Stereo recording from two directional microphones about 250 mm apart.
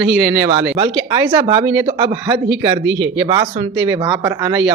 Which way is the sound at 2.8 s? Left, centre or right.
Right.